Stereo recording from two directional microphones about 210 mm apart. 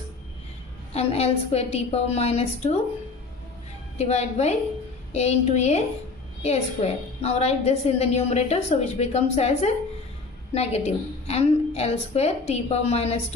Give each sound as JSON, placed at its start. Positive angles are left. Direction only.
{"t": 0.9, "sound": "a woman's voice", "side_deg": 30}
{"t": 4.0, "sound": "a woman's voice", "side_deg": 30}